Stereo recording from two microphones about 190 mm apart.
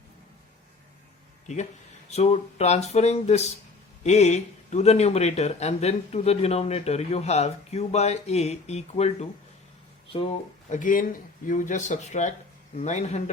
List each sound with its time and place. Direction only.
2.0 s speech: 35° left (ahead or behind)